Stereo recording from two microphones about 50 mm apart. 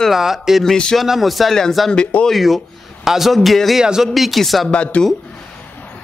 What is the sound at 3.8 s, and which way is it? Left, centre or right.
Speech, centre.